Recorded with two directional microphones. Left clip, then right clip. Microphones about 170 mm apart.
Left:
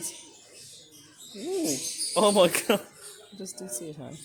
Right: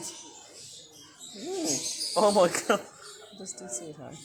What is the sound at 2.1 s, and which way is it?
Speech, 35° left (ahead or behind).